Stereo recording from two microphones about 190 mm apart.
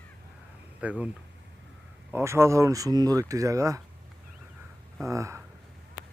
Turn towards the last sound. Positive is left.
turn(degrees=-15)  # may be behind; listen again after turning